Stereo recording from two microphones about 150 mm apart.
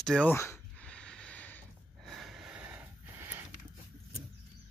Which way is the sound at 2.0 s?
Centre (ahead or behind).